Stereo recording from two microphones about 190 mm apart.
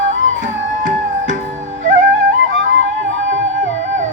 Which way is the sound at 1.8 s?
45° right (ahead or behind).